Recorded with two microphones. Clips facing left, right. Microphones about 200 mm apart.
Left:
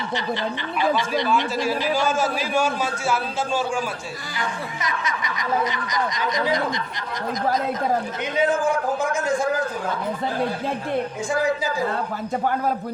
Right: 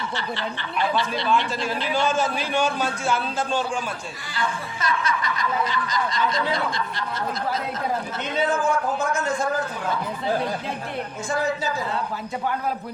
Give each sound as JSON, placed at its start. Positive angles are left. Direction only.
{"t": 0.2, "sound": "speech", "side_deg": 20}
{"t": 4.4, "sound": "speech", "side_deg": 20}
{"t": 8.4, "sound": "speech", "side_deg": 10}